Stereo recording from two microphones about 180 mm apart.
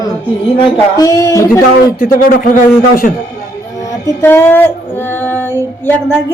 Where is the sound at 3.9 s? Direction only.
15° left (ahead or behind).